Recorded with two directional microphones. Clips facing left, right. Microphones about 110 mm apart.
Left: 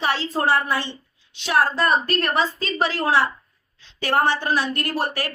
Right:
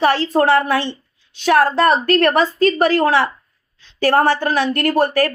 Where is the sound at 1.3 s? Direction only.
55° right (ahead or behind).